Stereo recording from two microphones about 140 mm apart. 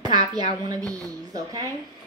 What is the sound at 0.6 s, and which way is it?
Speech, 25° right (ahead or behind).